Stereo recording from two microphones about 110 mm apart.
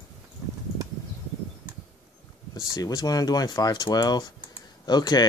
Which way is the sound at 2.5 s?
35° left (ahead or behind).